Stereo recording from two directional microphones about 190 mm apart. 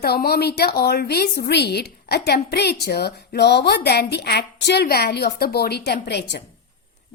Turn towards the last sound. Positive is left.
turn(degrees=65)  # may be behind; listen again after turning